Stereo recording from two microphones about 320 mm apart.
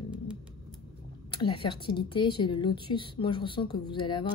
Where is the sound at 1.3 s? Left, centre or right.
Centre.